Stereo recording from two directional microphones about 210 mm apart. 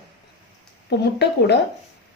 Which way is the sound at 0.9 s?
55° left (ahead or behind).